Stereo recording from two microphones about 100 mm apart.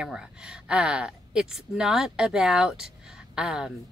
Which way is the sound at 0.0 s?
10° right (ahead or behind).